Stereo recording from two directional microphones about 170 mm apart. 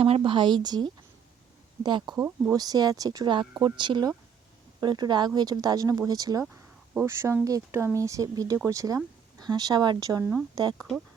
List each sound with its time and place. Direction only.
0.2 s speech: 30° right (ahead or behind)